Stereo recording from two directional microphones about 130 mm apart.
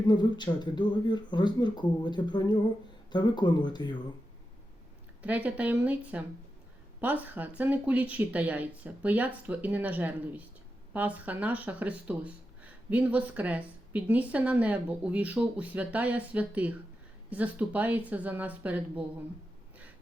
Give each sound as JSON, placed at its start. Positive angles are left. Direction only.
{"t": 0.1, "sound": "speech", "side_deg": 35}
{"t": 5.2, "sound": "speech", "side_deg": -10}